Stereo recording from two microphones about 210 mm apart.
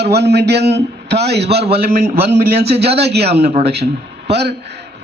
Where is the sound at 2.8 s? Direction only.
50° right (ahead or behind).